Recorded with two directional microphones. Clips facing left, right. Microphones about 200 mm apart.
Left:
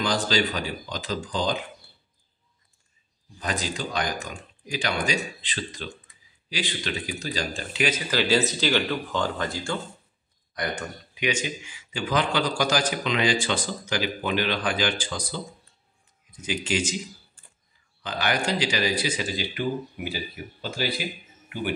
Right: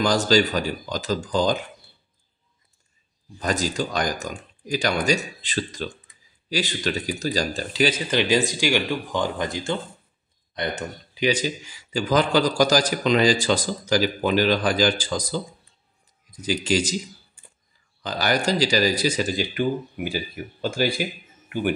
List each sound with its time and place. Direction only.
0.0 s speech: 45° right (ahead or behind)
3.3 s speech: 45° right (ahead or behind)
8.1 s speech: 15° right (ahead or behind); by 16.9 s 40° right (ahead or behind)
18.0 s speech: 40° right (ahead or behind)